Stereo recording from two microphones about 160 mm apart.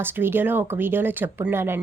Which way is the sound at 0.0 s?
15° right (ahead or behind).